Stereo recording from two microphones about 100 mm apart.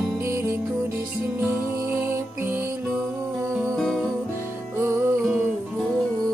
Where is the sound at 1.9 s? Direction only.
25° right (ahead or behind).